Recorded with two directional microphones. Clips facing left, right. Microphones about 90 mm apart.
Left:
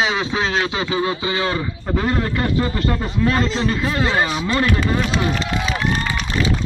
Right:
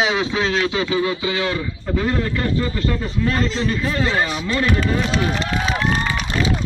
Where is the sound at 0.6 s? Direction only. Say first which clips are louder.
Right 1 dB; 25° left (ahead or behind).